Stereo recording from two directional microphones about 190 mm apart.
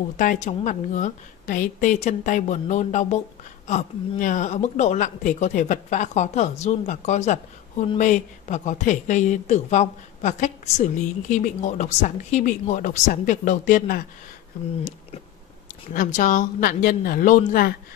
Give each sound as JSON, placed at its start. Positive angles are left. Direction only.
{"t": 0.2, "sound": "a woman's voice", "side_deg": 40}
{"t": 15.9, "sound": "speech", "side_deg": 45}